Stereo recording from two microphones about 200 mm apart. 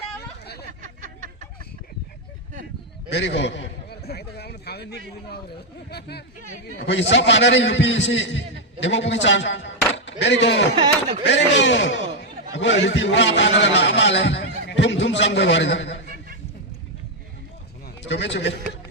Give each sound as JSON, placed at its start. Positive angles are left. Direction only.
{"t": 0.2, "sound": "hubbub", "side_deg": 55}
{"t": 3.1, "sound": "a sound", "side_deg": 60}
{"t": 5.9, "sound": "a man's voice", "side_deg": 55}
{"t": 18.1, "sound": "a man's voice", "side_deg": 65}